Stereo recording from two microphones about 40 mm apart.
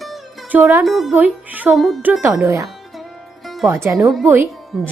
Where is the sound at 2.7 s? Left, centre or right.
Centre.